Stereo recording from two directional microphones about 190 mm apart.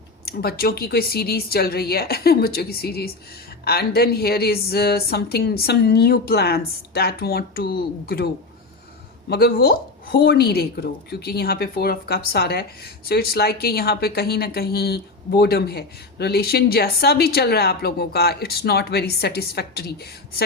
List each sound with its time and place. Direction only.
0.3 s a woman's voice: 55° left (ahead or behind)
9.3 s a woman's voice: 55° left (ahead or behind)